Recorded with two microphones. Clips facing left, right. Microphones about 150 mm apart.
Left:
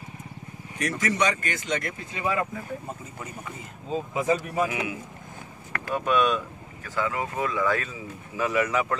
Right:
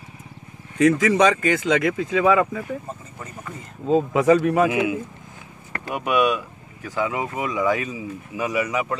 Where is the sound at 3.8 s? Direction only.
75° right (ahead or behind).